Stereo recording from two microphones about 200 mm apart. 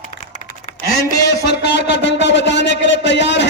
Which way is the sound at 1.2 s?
60° left (ahead or behind).